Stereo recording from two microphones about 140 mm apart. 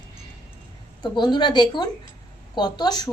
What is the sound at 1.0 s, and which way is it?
Speech, 30° left (ahead or behind).